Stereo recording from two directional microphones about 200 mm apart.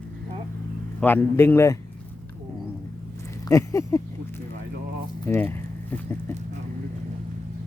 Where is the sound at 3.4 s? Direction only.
15° left (ahead or behind).